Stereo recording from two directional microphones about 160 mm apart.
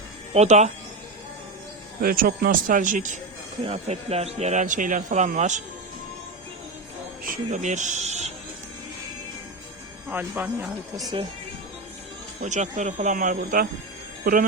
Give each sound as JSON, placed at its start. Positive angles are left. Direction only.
{"t": 0.3, "sound": "speech", "side_deg": -45}
{"t": 2.0, "sound": "speech", "side_deg": -65}
{"t": 3.6, "sound": "speech", "side_deg": -40}
{"t": 7.3, "sound": "speech", "side_deg": -50}
{"t": 10.1, "sound": "speech", "side_deg": -10}
{"t": 10.9, "sound": "speech", "side_deg": -25}
{"t": 12.4, "sound": "speech", "side_deg": -50}